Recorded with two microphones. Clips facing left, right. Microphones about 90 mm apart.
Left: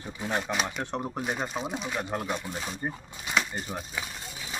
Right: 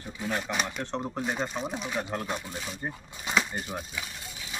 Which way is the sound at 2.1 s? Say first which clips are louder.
Left 1 dB; 15° left (ahead or behind).